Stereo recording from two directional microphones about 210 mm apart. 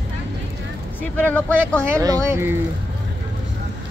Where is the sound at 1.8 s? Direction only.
15° right (ahead or behind).